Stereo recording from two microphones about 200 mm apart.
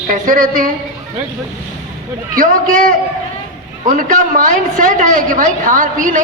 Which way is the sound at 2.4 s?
40° right (ahead or behind).